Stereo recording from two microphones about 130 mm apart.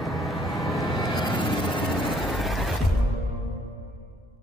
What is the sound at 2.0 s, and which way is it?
Vehicle, centre (ahead or behind).